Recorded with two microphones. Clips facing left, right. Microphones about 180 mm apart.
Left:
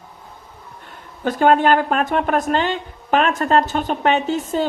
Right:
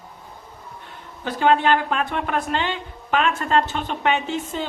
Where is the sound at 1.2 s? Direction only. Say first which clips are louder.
Left 4 dB; 45° left (ahead or behind).